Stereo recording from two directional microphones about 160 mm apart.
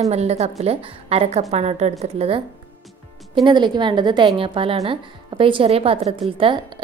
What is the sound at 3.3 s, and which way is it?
A woman's voice, 30° right (ahead or behind).